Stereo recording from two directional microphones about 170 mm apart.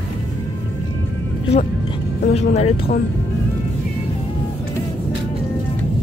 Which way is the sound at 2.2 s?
40° left (ahead or behind).